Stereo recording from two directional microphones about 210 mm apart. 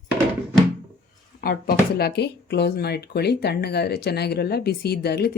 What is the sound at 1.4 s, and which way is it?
Speech, 45° left (ahead or behind).